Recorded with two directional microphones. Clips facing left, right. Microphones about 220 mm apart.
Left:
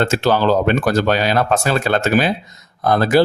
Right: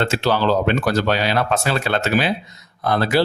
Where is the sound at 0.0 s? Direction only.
50° left (ahead or behind).